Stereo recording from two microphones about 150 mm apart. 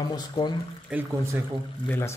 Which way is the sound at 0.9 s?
5° right (ahead or behind).